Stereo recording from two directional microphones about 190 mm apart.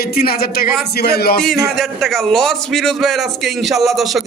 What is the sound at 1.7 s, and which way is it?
A man's voice, centre (ahead or behind).